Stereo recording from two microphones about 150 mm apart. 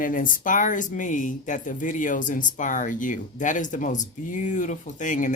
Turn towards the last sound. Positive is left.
turn(degrees=60)  # may be behind; listen again after turning